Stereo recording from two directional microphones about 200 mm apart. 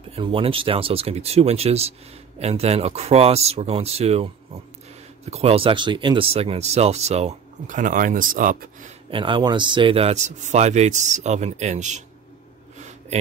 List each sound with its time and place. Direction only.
0.1 s speech: 25° right (ahead or behind); by 8.6 s 45° right (ahead or behind)
9.1 s speech: 25° right (ahead or behind)
12.7 s a sound: 35° right (ahead or behind)